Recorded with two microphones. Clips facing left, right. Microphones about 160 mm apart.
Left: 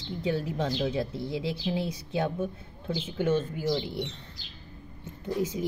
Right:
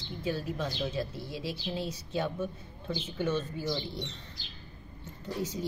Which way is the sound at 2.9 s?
10° left (ahead or behind).